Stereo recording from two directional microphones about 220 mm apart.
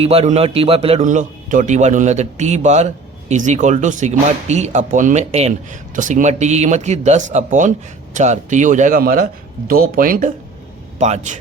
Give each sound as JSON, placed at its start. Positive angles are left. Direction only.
{"t": 0.0, "sound": "a man's voice", "side_deg": -25}